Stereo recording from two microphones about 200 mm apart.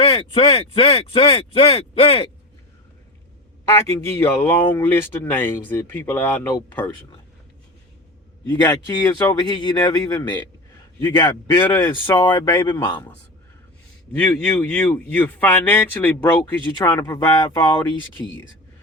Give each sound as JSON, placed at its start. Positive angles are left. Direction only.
{"t": 0.0, "sound": "speech", "side_deg": 25}
{"t": 3.7, "sound": "speech", "side_deg": 15}
{"t": 8.4, "sound": "speech", "side_deg": 15}
{"t": 12.2, "sound": "speech", "side_deg": 20}
{"t": 12.8, "sound": "speech", "side_deg": 10}
{"t": 14.2, "sound": "speech", "side_deg": 10}